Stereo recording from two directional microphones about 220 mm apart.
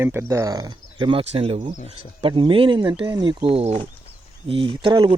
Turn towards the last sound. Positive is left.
turn(degrees=-20)  # may be behind; listen again after turning